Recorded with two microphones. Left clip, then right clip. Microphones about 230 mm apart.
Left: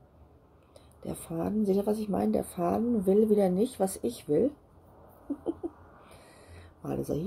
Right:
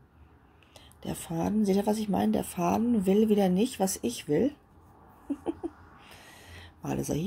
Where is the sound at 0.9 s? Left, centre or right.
Right.